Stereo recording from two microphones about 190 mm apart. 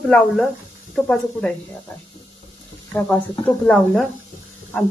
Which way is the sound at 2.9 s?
10° left (ahead or behind).